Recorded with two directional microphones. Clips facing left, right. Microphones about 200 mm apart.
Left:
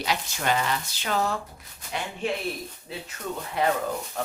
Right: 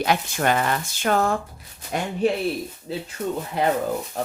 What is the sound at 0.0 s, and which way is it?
Speech, 55° right (ahead or behind).